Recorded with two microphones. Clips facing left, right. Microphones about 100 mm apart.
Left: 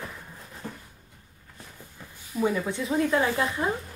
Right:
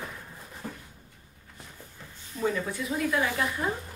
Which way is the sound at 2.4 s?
15° left (ahead or behind).